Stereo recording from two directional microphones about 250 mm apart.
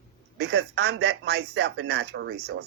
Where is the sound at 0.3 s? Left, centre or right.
Right.